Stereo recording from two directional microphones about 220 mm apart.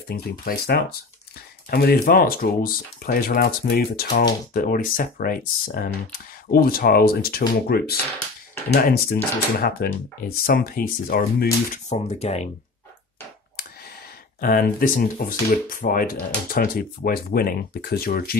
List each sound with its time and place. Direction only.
0.1 s speech: 45° left (ahead or behind)
11.7 s speech: 30° left (ahead or behind)
14.4 s speech: 40° left (ahead or behind)